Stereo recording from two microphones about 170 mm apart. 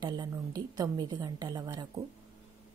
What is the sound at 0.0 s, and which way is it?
A woman's voice, 25° right (ahead or behind).